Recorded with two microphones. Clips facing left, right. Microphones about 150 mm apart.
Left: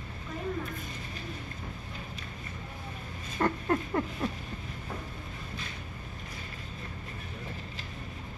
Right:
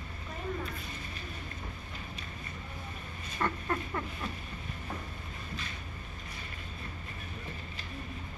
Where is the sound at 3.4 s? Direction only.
40° left (ahead or behind).